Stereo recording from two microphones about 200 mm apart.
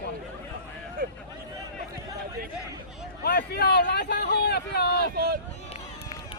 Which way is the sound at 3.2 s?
45° left (ahead or behind).